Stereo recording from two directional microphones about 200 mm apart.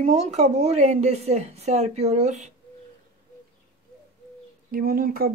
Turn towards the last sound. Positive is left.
turn(degrees=-45)  # may be behind; listen again after turning